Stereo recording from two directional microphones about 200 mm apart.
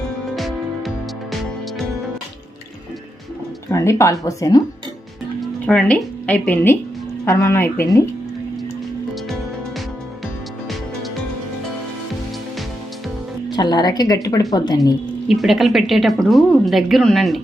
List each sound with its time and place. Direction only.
0.3 s music: centre (ahead or behind)
3.7 s speech: 15° left (ahead or behind)
5.4 s speech: 5° left (ahead or behind)
13.5 s speech: 20° left (ahead or behind)
15.3 s a woman's voice: centre (ahead or behind)